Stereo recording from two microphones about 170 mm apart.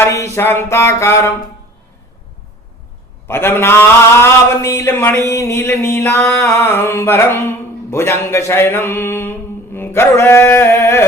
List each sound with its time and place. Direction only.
0.0 s a man's voice: 15° left (ahead or behind)
3.2 s a man's voice: 15° left (ahead or behind)